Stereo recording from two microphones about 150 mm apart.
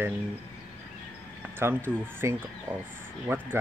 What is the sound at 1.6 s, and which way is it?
Speech, 15° right (ahead or behind).